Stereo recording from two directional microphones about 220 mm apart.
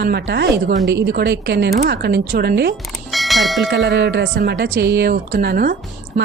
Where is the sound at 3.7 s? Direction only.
50° right (ahead or behind).